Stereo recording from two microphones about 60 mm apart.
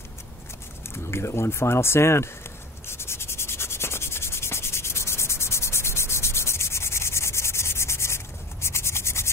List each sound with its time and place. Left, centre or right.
0.8 s speech: left
2.9 s sanding: left